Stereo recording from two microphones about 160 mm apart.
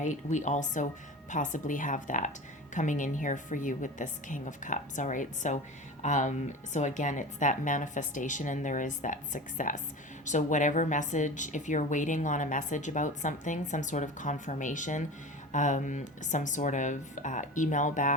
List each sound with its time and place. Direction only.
0.0 s a woman's voice: 50° left (ahead or behind)